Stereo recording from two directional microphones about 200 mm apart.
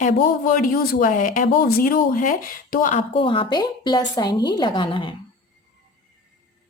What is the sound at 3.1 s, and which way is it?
A woman's voice, 25° left (ahead or behind).